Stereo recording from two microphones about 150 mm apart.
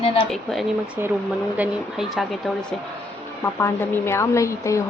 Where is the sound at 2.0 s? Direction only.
Centre (ahead or behind).